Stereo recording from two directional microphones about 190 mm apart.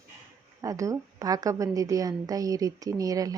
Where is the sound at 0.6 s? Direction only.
15° right (ahead or behind).